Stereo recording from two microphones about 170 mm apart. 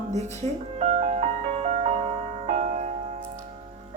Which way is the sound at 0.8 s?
40° right (ahead or behind).